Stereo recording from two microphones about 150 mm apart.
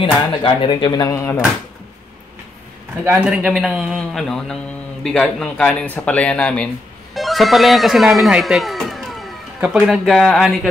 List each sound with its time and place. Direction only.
0.0 s speech: 35° left (ahead or behind)
3.3 s a man's voice: 5° right (ahead or behind)